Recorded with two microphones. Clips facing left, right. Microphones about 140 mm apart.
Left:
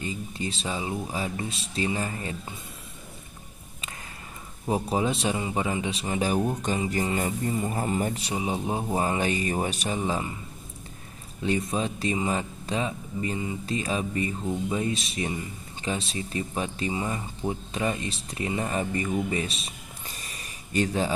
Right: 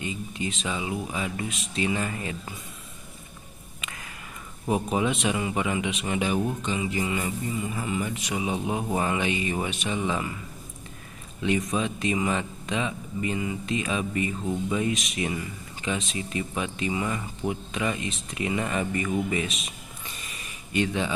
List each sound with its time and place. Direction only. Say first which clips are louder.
0.0 s a man's voice: right 1 dB; 35° left (ahead or behind)
4.6 s a man's voice: right 1 dB; 30° left (ahead or behind)
11.4 s a man's voice: right 1 dB; 35° left (ahead or behind)
20.7 s a man's voice: left 1 dB; 40° left (ahead or behind)